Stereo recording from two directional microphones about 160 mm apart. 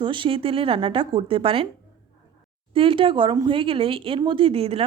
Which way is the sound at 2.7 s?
35° right (ahead or behind).